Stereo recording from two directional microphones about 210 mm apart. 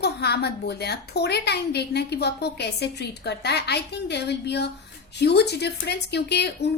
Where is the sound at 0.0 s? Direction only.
50° left (ahead or behind).